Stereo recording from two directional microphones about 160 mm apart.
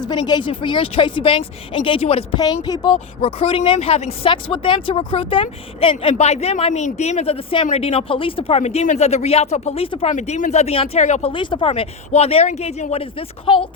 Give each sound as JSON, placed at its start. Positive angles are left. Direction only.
{"t": 0.0, "sound": "speech", "side_deg": 25}
{"t": 11.3, "sound": "speech", "side_deg": 30}